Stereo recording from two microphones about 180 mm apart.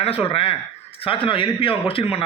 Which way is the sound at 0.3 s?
30° left (ahead or behind).